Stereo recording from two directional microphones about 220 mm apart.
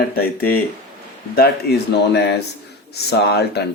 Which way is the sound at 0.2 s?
45° left (ahead or behind).